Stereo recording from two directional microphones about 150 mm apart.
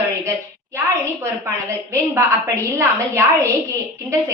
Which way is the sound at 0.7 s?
15° right (ahead or behind).